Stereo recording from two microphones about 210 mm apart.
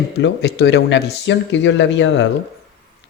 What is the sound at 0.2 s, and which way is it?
Speech, 55° left (ahead or behind).